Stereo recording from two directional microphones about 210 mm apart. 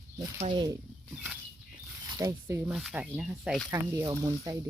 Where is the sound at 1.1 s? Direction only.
5° right (ahead or behind).